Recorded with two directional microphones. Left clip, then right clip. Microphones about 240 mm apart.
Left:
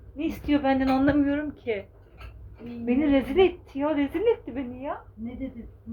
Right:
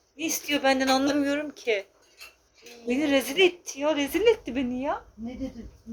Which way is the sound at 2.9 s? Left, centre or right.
Right.